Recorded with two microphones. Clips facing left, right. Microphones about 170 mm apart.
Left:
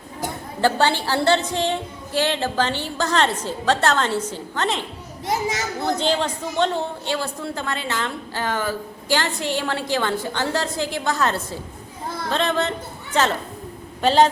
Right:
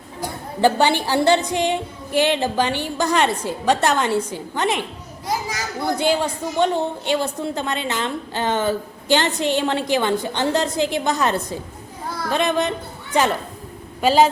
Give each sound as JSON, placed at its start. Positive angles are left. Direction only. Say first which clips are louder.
{"t": 0.6, "sound": "a woman's voice", "louder": "right 3 dB", "side_deg": -15}
{"t": 5.2, "sound": "a child's voice", "louder": "left 2 dB", "side_deg": 25}
{"t": 6.0, "sound": "a woman's voice", "louder": "right 2 dB", "side_deg": -10}